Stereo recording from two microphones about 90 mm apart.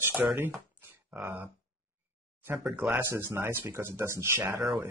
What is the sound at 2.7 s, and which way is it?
Speech, 20° right (ahead or behind).